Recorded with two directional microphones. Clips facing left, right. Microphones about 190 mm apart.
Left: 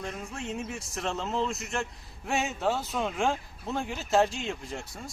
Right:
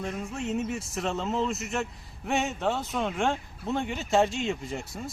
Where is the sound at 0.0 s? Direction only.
Centre (ahead or behind).